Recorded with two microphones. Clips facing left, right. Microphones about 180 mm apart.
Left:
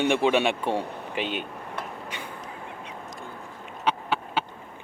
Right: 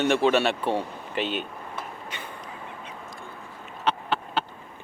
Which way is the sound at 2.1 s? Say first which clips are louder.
Left 1 dB; 10° left (ahead or behind).